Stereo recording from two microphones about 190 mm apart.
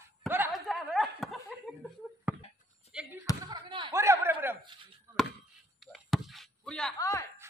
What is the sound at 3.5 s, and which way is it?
Basketball bounce, 25° right (ahead or behind).